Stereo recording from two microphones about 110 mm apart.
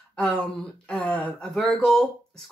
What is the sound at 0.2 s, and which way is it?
A woman's voice, 5° left (ahead or behind).